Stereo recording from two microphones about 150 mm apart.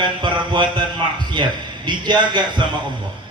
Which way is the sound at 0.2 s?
30° right (ahead or behind).